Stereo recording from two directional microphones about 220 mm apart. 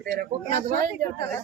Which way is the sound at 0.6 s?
40° right (ahead or behind).